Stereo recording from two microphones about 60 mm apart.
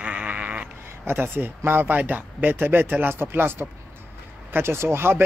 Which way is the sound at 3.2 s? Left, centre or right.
Right.